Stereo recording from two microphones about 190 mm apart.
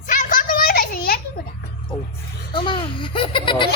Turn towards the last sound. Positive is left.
turn(degrees=25)  # may be behind; listen again after turning